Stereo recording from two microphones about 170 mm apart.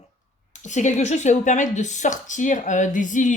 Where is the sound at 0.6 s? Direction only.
45° left (ahead or behind).